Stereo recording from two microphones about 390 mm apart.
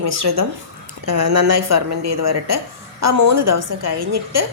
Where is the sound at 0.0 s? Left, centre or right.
Right.